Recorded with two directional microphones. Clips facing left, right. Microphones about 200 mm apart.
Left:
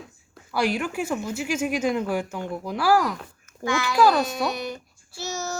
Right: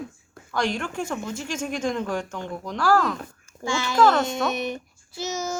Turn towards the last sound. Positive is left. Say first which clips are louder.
# right 2 dB
turn(degrees=-20)  # may be behind; listen again after turning